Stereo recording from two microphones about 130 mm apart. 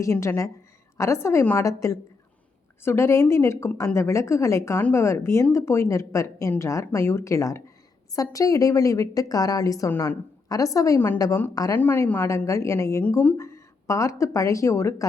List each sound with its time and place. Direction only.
0.0 s a woman's voice: 20° left (ahead or behind)